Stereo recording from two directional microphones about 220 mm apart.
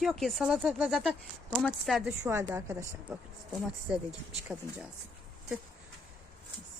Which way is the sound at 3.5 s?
Centre (ahead or behind).